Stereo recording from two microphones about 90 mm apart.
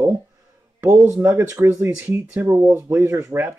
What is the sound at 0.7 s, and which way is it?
Speech, 25° right (ahead or behind).